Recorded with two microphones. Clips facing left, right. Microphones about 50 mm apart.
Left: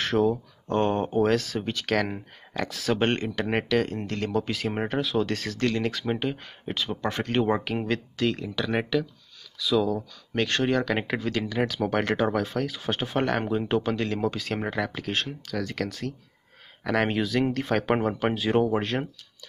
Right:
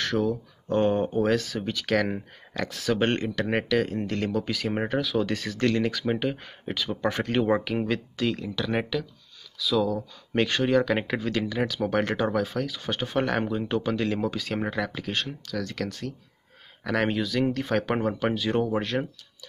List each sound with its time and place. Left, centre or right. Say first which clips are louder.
0.1 s speech: left 3 dB; centre
2.6 s speech: left 1 dB; centre
3.4 s speech: left 1 dB; centre
4.3 s speech: even; centre
7.3 s speech: even; centre
10.3 s speech: right 2 dB; centre
13.5 s speech: left 2 dB; centre
13.7 s speech: right 3 dB; centre
14.3 s speech: even; centre
15.2 s speech: left 1 dB; centre
15.8 s speech: left 1 dB; centre
17.9 s speech: left 1 dB; centre
18.7 s speech: left 1 dB; centre